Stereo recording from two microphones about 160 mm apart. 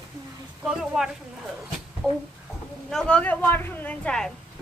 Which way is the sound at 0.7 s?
5° right (ahead or behind).